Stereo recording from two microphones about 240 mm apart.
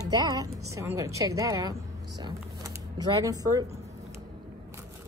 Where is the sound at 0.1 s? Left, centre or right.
Centre.